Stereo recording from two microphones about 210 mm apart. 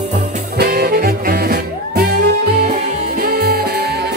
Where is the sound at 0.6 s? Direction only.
50° right (ahead or behind).